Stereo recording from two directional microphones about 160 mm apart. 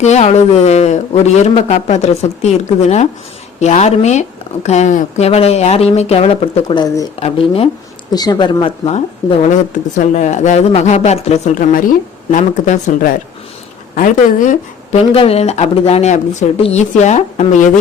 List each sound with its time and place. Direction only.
0.0 s speech: 45° left (ahead or behind); by 7.0 s 25° left (ahead or behind)
7.2 s speech: 40° left (ahead or behind)
8.1 s speech: 25° left (ahead or behind); by 15.0 s 55° left (ahead or behind)
15.1 s speech: 35° left (ahead or behind)